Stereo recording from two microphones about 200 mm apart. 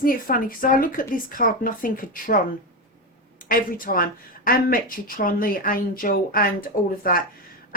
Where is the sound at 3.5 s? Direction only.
45° left (ahead or behind).